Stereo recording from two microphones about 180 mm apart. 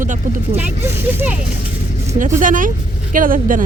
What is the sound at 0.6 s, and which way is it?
Speech, 10° right (ahead or behind).